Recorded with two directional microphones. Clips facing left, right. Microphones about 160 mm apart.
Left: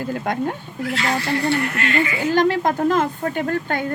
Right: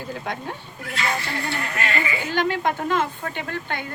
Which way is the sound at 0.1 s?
50° left (ahead or behind).